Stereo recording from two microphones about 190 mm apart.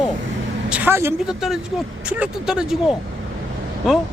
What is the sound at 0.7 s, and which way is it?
Vehicle, 10° right (ahead or behind).